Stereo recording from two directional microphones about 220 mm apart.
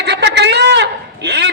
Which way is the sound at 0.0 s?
50° right (ahead or behind).